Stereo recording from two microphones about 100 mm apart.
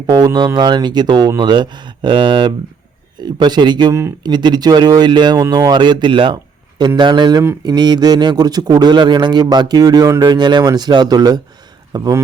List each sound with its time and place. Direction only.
0.3 s a man's voice: 45° right (ahead or behind)
10.2 s a man's voice: 50° right (ahead or behind)